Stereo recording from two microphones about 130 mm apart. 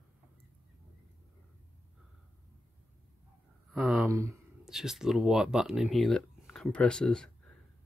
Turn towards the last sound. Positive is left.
turn(degrees=5)  # may be behind; listen again after turning